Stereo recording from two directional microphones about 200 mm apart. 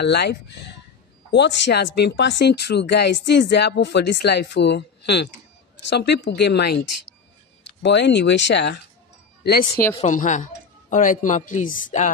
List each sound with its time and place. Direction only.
0.0 s speech: 55° left (ahead or behind)
7.8 s speech: 60° left (ahead or behind)
10.0 s speech: 40° left (ahead or behind)